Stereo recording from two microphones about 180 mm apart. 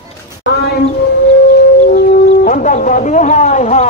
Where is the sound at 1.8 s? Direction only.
55° left (ahead or behind).